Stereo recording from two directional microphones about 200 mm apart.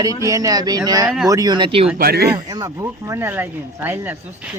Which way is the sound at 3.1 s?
10° right (ahead or behind).